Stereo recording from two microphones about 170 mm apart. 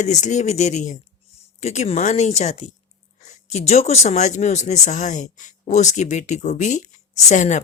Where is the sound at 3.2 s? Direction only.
40° left (ahead or behind).